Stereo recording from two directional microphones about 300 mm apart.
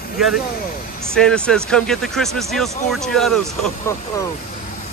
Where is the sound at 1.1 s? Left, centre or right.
Centre.